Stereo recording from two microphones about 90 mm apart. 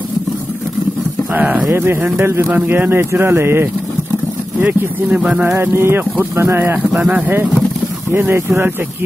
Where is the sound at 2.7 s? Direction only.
30° right (ahead or behind).